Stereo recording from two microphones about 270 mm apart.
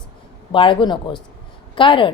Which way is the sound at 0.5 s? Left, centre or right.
Centre.